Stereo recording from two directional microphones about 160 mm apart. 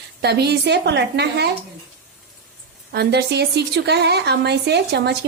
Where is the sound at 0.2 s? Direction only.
90° right.